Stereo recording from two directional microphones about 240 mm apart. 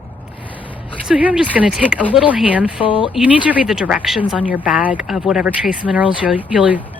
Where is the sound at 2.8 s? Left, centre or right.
Left.